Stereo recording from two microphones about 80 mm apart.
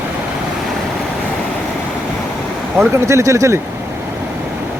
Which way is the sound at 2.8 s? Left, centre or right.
Right.